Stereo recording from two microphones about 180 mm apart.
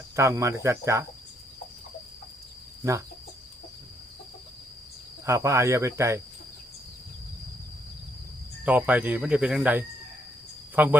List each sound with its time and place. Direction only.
0.2 s speech: 15° right (ahead or behind)
5.2 s speech: 15° right (ahead or behind)
8.6 s speech: 10° right (ahead or behind)